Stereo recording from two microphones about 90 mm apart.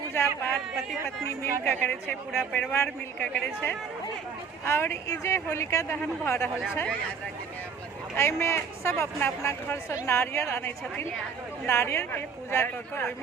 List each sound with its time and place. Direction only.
0.1 s a sound: 25° left (ahead or behind)
1.4 s a man's voice: 20° left (ahead or behind)
4.6 s speech: 30° left (ahead or behind)
8.1 s speech: 25° left (ahead or behind)